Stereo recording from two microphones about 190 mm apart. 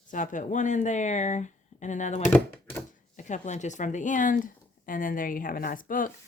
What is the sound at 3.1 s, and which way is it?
A woman's voice, 40° left (ahead or behind).